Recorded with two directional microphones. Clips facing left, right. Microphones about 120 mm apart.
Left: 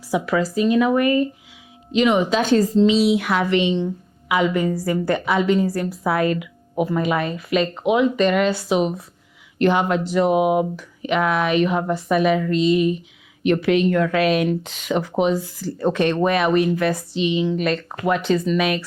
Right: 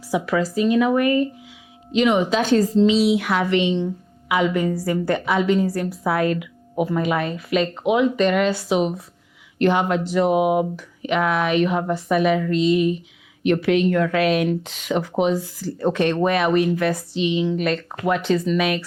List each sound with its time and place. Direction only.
0.1 s a woman's voice: 20° left (ahead or behind)